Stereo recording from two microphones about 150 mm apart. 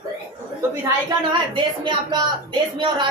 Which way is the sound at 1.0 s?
30° right (ahead or behind).